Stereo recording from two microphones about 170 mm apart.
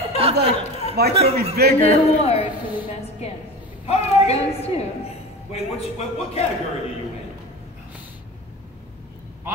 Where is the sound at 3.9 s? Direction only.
35° left (ahead or behind).